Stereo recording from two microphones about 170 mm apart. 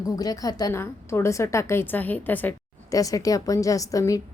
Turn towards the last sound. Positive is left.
turn(degrees=20)  # may be behind; listen again after turning